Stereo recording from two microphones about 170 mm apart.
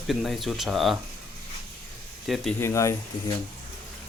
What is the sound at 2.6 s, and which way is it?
Speech, 15° left (ahead or behind).